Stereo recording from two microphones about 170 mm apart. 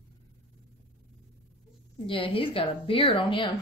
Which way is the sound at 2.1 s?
30° left (ahead or behind).